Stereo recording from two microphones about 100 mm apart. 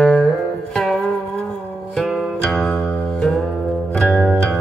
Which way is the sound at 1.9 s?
Centre (ahead or behind).